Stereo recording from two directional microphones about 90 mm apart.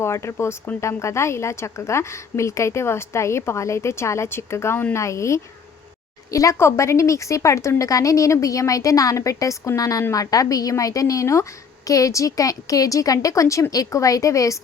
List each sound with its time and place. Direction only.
0.0 s a woman's voice: 30° left (ahead or behind)